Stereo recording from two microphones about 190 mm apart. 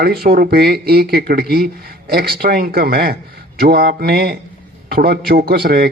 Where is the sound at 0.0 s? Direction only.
55° right (ahead or behind).